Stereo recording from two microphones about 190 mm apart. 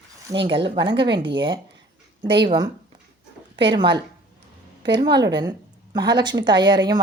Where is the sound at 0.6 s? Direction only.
25° right (ahead or behind).